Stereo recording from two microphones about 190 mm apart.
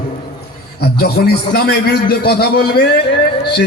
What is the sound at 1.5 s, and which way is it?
A man's voice, 55° left (ahead or behind).